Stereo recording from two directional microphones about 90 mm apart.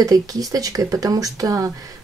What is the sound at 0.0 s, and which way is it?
Speech, 40° right (ahead or behind).